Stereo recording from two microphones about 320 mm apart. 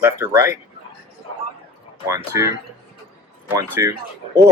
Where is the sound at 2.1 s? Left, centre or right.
Centre.